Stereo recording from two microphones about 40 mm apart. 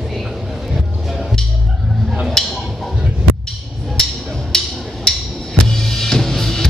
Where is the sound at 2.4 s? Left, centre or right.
Centre.